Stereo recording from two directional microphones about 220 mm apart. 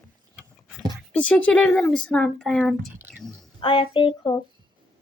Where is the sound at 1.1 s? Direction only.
5° left (ahead or behind).